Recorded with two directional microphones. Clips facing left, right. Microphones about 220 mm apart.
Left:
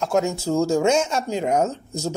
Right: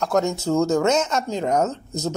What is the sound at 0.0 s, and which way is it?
Speech, 5° left (ahead or behind).